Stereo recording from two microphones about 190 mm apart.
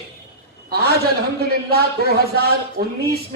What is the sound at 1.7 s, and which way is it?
A man's voice, 55° right (ahead or behind).